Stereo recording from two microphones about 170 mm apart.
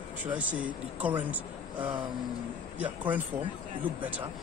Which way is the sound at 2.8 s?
10° right (ahead or behind).